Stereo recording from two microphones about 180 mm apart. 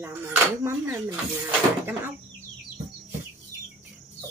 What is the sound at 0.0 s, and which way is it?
Speech, 10° right (ahead or behind).